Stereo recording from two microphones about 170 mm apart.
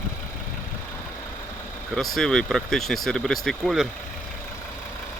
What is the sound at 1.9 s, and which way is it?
Speech, 5° left (ahead or behind).